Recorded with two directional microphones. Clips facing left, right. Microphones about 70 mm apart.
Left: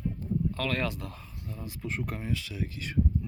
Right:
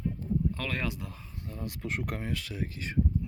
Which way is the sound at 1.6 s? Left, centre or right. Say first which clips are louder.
Right 1 dB; right.